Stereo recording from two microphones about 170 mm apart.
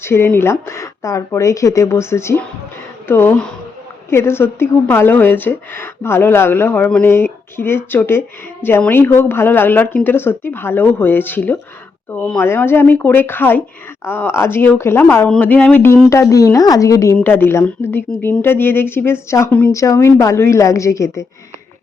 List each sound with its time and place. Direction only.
0.0 s a woman's voice: 15° left (ahead or behind)